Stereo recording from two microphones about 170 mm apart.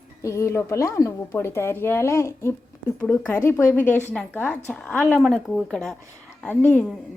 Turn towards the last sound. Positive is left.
turn(degrees=10)  # may be behind; listen again after turning